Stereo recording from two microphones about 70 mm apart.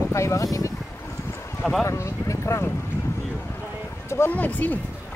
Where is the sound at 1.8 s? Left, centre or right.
Left.